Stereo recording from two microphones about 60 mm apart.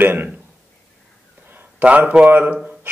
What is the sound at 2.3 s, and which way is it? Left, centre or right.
Speech, right.